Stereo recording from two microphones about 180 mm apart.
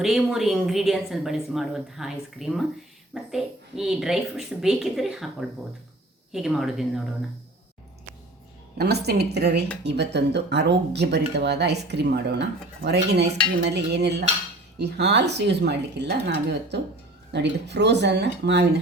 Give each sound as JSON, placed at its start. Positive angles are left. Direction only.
{"t": 0.0, "sound": "speech", "side_deg": 0}
{"t": 8.8, "sound": "speech", "side_deg": -65}